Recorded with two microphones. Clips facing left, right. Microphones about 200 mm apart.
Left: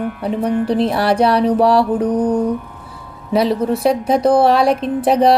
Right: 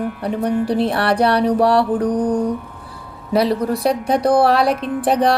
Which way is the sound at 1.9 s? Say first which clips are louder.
Left 2 dB; 5° left (ahead or behind).